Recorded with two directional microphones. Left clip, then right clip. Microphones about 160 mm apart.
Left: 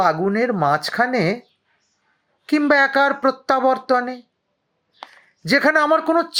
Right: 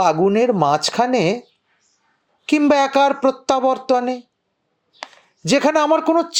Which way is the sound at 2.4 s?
20° right (ahead or behind).